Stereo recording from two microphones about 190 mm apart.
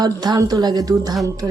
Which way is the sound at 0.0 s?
20° right (ahead or behind).